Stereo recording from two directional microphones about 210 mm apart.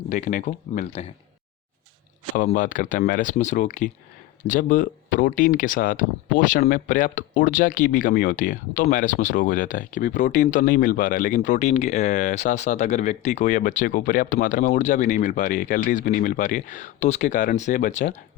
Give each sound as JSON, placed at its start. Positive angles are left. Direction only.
{"t": 0.1, "sound": "speech", "side_deg": 40}
{"t": 2.3, "sound": "speech", "side_deg": 40}